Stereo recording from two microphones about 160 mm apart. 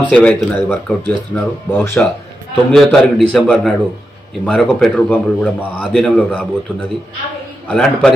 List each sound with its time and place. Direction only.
0.0 s a man's voice: 5° left (ahead or behind)
7.6 s a man's voice: 5° left (ahead or behind)